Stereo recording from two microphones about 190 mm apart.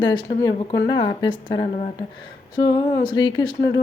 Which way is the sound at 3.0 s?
20° left (ahead or behind).